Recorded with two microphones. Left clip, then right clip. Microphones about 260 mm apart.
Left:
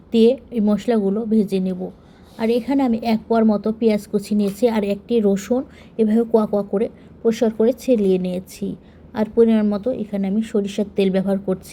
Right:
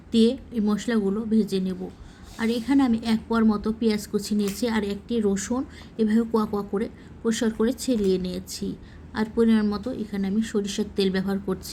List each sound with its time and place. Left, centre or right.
0.1 s a woman's voice: centre